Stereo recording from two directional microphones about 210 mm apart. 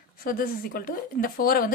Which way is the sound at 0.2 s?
45° left (ahead or behind).